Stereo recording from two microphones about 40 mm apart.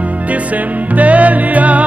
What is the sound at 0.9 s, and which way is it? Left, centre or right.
Music, right.